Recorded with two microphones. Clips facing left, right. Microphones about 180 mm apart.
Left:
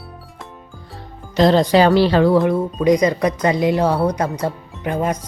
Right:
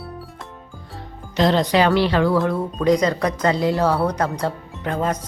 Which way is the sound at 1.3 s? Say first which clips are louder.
Left 4 dB; 35° left (ahead or behind).